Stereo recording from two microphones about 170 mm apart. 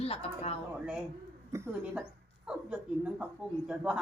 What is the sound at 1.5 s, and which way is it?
Speech, 15° right (ahead or behind).